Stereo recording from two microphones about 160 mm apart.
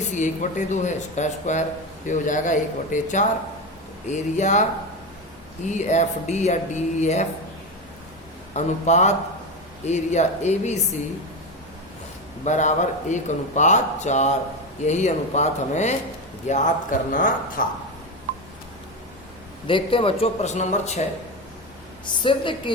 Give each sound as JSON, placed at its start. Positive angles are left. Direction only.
{"t": 0.1, "sound": "a man's voice", "side_deg": 50}
{"t": 5.6, "sound": "a man's voice", "side_deg": 45}
{"t": 8.5, "sound": "a man's voice", "side_deg": 45}
{"t": 12.5, "sound": "a man's voice", "side_deg": 50}
{"t": 19.6, "sound": "speech", "side_deg": 30}
{"t": 22.2, "sound": "speech", "side_deg": 30}